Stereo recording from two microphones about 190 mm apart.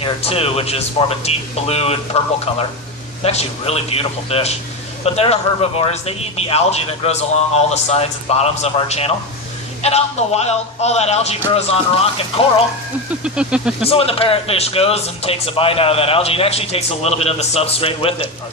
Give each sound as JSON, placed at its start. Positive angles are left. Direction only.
{"t": 0.0, "sound": "speech", "side_deg": 30}
{"t": 13.2, "sound": "speech", "side_deg": -5}
{"t": 13.8, "sound": "speech", "side_deg": 30}